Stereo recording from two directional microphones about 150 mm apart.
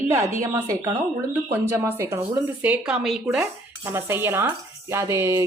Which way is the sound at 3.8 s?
15° right (ahead or behind).